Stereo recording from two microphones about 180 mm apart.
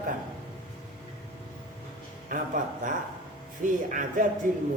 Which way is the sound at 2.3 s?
45° right (ahead or behind).